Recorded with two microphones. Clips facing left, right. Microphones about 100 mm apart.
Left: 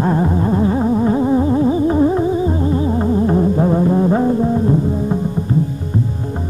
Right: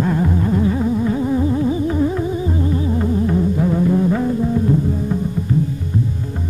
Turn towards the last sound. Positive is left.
turn(degrees=35)  # may be behind; listen again after turning